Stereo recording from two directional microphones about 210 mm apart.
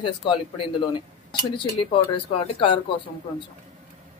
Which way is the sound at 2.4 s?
25° left (ahead or behind).